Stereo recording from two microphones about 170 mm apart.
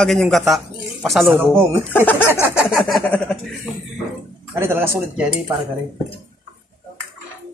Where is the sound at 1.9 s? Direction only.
10° left (ahead or behind).